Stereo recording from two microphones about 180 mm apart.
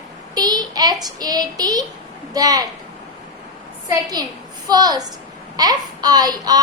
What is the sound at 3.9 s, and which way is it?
A woman's voice, 20° right (ahead or behind).